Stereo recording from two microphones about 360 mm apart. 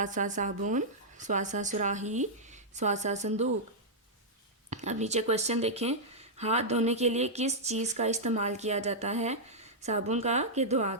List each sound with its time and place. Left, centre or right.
0.0 s speech: right
4.7 s speech: centre